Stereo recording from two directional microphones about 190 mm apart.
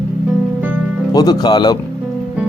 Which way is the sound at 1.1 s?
20° left (ahead or behind).